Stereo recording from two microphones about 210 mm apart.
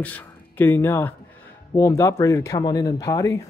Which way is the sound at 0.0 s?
10° left (ahead or behind).